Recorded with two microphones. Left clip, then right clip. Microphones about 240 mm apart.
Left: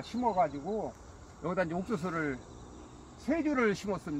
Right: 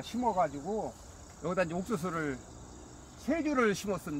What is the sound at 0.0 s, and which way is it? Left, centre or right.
Speech, centre.